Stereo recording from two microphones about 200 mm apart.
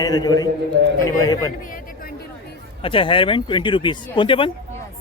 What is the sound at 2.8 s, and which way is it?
Speech, 25° left (ahead or behind).